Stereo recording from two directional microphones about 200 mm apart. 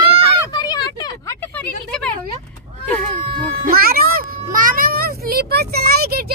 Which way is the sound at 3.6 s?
50° right (ahead or behind).